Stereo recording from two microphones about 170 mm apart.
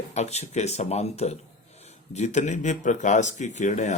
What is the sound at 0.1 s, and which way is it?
Speech, 40° left (ahead or behind).